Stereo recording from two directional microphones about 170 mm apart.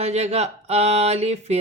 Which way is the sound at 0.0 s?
40° right (ahead or behind).